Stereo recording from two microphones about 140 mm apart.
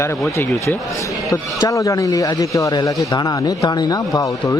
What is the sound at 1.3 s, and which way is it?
A man's voice, 25° left (ahead or behind).